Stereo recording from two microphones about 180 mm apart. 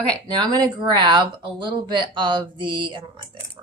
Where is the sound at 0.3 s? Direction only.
25° right (ahead or behind).